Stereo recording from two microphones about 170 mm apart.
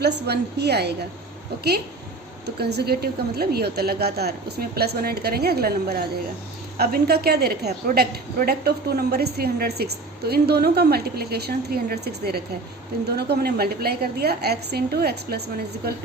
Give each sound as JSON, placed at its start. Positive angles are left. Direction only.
{"t": 0.0, "sound": "a woman's voice", "side_deg": -75}
{"t": 2.6, "sound": "a woman's voice", "side_deg": -75}